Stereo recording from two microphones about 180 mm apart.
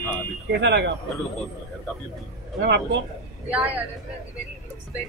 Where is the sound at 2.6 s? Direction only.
70° right (ahead or behind).